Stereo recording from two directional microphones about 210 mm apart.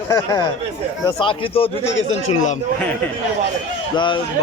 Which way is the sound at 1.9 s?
70° left (ahead or behind).